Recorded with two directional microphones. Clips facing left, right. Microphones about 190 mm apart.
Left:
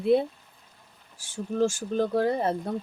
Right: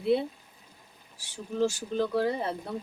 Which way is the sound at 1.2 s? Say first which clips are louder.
Left 3 dB; 45° left (ahead or behind).